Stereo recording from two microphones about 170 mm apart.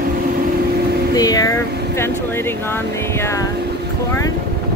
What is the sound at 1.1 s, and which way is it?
Speech, 20° left (ahead or behind).